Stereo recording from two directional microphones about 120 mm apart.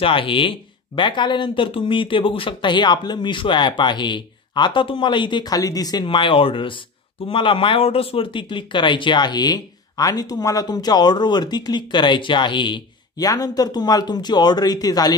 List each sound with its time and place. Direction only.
0.0 s speech: 45° left (ahead or behind)
6.0 s speech: 45° left (ahead or behind)